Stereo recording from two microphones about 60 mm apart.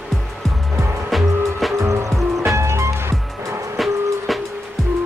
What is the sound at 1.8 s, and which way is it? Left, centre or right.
Music, right.